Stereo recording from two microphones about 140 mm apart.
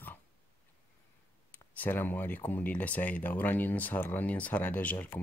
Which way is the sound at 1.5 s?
10° left (ahead or behind).